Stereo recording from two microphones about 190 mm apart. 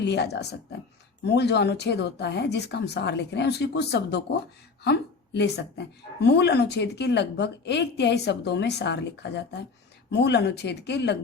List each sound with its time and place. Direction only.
0.0 s a woman's voice: 60° left (ahead or behind)